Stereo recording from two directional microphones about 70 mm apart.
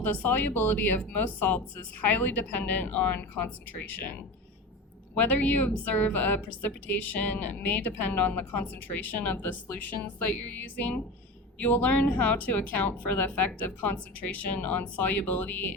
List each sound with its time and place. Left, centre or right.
0.0 s a woman's voice: left
5.1 s a woman's voice: left